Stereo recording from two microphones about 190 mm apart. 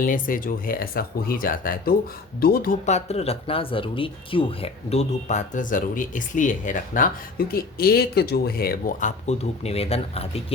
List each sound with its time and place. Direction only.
0.0 s speech: 45° left (ahead or behind); by 10.4 s 30° left (ahead or behind)